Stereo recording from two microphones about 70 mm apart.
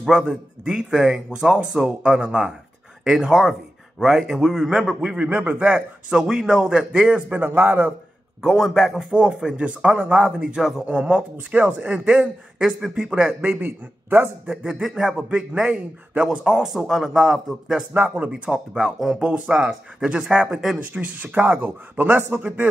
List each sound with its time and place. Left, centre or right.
0.0 s a man's voice: centre
6.0 s a man's voice: centre
7.3 s speech: right
8.5 s speech: centre
9.1 s a man's voice: centre
13.4 s speech: right
14.4 s a man's voice: centre
18.1 s a man's voice: centre
20.9 s speech: centre